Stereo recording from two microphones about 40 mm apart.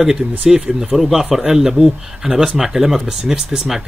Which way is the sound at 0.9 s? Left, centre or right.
Centre.